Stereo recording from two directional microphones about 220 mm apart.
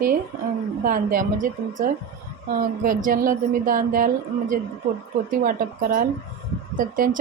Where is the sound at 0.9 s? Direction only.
40° right (ahead or behind).